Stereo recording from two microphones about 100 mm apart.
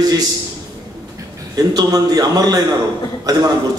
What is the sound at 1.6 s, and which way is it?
A man's voice, 40° right (ahead or behind).